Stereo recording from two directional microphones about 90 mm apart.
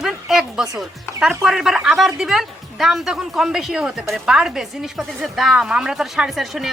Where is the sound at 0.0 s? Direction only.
5° right (ahead or behind).